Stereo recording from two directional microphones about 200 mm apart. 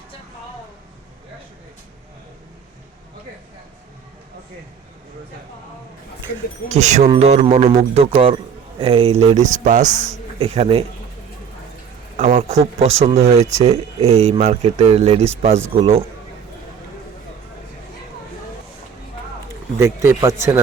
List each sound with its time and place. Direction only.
6.7 s speech: 35° right (ahead or behind)
12.1 s a man's voice: 35° right (ahead or behind)
19.8 s speech: 15° right (ahead or behind)